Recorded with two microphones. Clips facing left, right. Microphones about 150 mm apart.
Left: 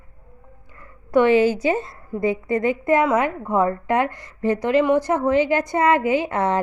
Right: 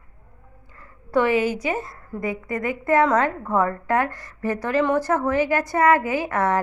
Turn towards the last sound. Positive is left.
turn(degrees=20)  # may be behind; listen again after turning